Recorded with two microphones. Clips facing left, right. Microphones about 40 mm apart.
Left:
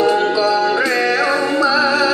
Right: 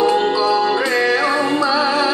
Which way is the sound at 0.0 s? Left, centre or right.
Centre.